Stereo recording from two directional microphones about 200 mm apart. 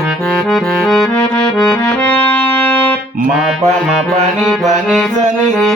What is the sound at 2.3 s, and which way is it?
Music, 10° left (ahead or behind).